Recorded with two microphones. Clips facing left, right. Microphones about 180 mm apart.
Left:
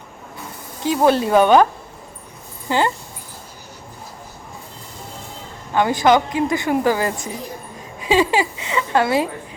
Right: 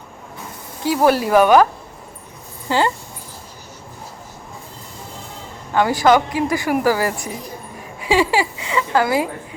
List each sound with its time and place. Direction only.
0.8 s speech: 20° left (ahead or behind)
2.6 s speech: 20° left (ahead or behind)
5.7 s speech: 20° left (ahead or behind)